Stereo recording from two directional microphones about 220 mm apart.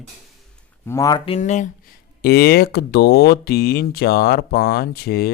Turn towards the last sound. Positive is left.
turn(degrees=45)  # may be behind; listen again after turning